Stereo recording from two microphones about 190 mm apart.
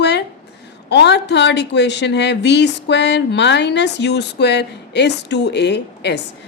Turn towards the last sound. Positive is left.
turn(degrees=65)  # may be behind; listen again after turning